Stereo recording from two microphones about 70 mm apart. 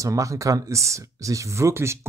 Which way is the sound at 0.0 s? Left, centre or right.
Right.